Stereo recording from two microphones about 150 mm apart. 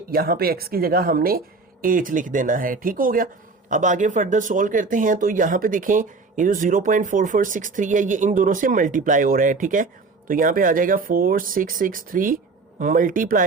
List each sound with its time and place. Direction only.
0.1 s speech: 85° right
1.8 s speech: 65° right (ahead or behind)
3.7 s speech: 55° right (ahead or behind)